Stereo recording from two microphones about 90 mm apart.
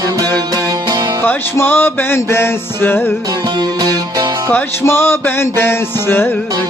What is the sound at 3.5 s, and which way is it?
Music, 55° right (ahead or behind).